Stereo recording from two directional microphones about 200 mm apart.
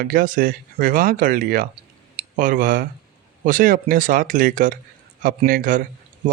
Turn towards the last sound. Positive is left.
turn(degrees=-40)  # may be behind; listen again after turning